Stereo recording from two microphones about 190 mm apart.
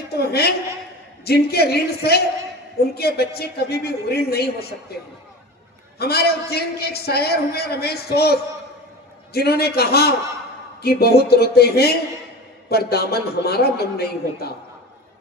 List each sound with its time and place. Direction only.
0.1 s a sound: 55° left (ahead or behind)
1.2 s a man's voice: 55° left (ahead or behind)
5.9 s a man's voice: 55° left (ahead or behind)